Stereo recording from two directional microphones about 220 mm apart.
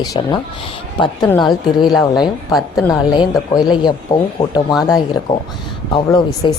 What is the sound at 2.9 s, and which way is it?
Speech, 20° left (ahead or behind).